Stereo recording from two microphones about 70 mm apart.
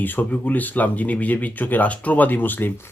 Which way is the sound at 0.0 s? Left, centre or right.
Left.